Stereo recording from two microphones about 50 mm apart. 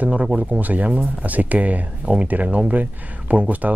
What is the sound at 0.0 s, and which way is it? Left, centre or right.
Speech, right.